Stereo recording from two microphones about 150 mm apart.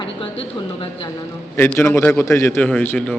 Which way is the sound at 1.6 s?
15° left (ahead or behind).